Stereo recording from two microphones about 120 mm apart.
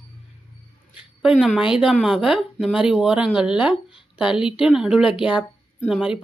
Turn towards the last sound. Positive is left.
turn(degrees=-10)  # may be behind; listen again after turning